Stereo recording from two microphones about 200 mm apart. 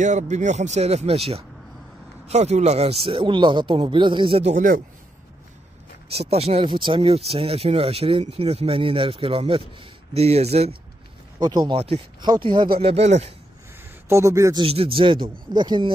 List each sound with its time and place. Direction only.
0.0 s speech: 35° right (ahead or behind)
6.0 s speech: 30° right (ahead or behind)
11.3 s speech: 20° right (ahead or behind)
14.0 s speech: 15° right (ahead or behind)